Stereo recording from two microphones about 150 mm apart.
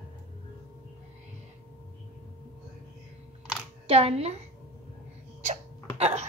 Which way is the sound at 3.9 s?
40° right (ahead or behind).